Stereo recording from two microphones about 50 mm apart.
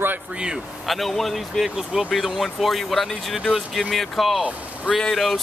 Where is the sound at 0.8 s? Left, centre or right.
Centre.